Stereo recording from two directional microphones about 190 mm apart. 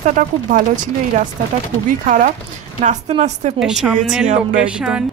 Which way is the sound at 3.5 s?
5° right (ahead or behind).